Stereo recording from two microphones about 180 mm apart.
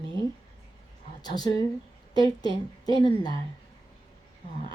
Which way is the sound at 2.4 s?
20° left (ahead or behind).